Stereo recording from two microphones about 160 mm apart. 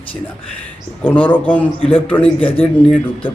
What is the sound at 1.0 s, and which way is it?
A man's voice, 10° left (ahead or behind).